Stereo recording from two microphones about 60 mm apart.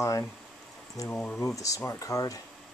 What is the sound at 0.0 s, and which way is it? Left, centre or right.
Speech, left.